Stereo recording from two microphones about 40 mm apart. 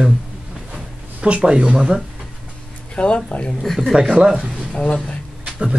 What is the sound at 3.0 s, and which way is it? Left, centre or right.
Speech, left.